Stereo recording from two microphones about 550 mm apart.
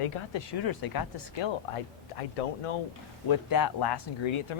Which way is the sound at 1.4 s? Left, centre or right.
Left.